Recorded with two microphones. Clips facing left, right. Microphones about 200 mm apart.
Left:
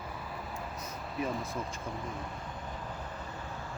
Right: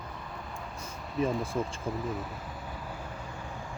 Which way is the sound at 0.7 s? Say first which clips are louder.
Right 7 dB; 30° right (ahead or behind).